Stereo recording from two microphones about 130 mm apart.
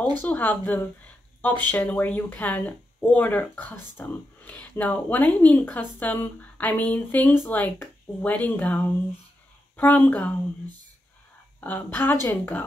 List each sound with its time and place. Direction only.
0.2 s speech: 10° left (ahead or behind)
11.6 s speech: 15° left (ahead or behind)